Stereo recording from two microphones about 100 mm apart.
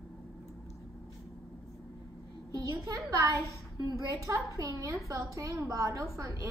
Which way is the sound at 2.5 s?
30° right (ahead or behind).